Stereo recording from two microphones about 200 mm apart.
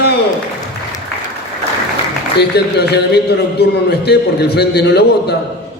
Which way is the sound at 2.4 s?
55° left (ahead or behind).